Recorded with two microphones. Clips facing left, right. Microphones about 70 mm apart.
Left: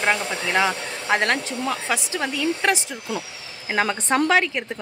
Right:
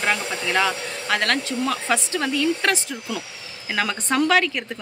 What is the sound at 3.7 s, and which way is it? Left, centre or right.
Speech, left.